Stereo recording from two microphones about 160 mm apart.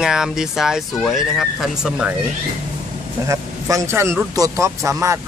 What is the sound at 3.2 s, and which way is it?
Speech, 20° right (ahead or behind).